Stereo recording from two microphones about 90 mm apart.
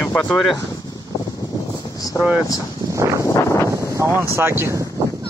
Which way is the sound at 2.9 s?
35° right (ahead or behind).